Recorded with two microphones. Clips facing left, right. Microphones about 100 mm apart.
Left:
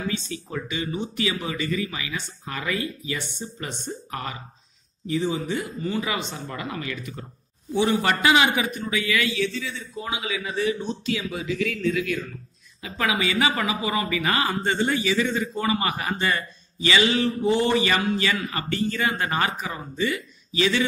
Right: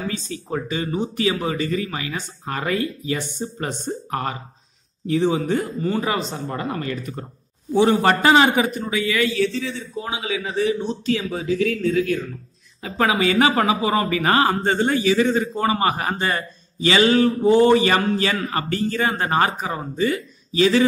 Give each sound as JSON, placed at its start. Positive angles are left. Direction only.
{"t": 0.1, "sound": "a man's voice", "side_deg": -40}